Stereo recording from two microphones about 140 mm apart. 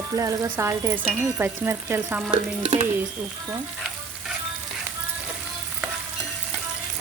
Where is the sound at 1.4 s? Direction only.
15° right (ahead or behind).